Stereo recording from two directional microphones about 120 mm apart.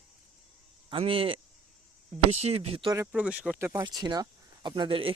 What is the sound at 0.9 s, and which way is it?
Speech, 50° right (ahead or behind).